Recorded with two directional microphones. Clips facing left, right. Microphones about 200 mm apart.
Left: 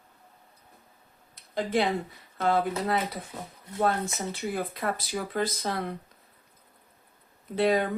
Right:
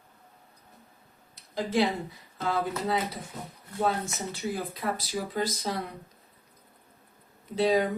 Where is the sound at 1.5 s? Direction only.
55° left (ahead or behind).